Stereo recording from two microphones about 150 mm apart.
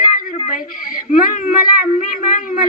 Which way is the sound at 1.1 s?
60° left (ahead or behind).